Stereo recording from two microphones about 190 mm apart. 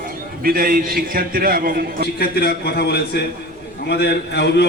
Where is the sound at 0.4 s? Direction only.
50° right (ahead or behind).